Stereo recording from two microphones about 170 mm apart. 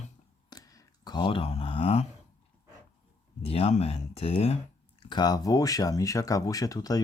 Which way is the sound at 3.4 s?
35° left (ahead or behind).